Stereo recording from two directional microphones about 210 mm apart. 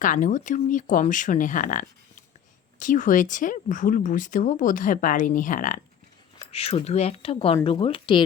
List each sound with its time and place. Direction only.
0.0 s speech: 40° left (ahead or behind)
6.5 s speech: 30° left (ahead or behind)